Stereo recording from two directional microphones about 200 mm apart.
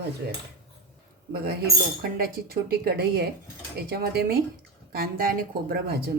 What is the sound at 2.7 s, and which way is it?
Speech, 50° right (ahead or behind).